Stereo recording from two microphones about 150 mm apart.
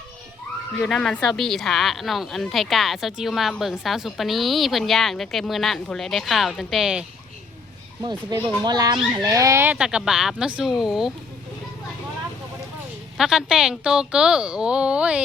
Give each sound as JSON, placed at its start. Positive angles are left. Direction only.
{"t": 0.9, "sound": "speech", "side_deg": 5}
{"t": 8.6, "sound": "speech", "side_deg": -25}
{"t": 13.1, "sound": "speech", "side_deg": -5}